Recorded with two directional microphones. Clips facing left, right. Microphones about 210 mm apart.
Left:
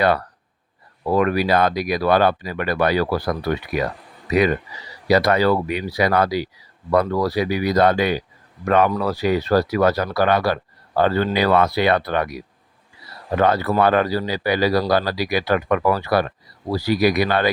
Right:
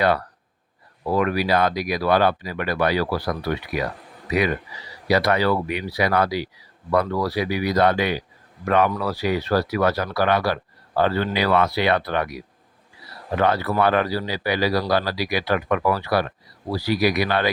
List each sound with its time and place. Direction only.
1.1 s speech: 50° left (ahead or behind)
5.0 s speech: 45° left (ahead or behind)
13.3 s speech: 45° left (ahead or behind)